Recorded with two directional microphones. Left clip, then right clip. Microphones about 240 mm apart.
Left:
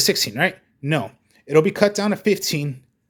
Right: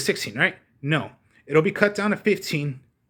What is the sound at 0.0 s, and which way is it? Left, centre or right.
Speech, centre.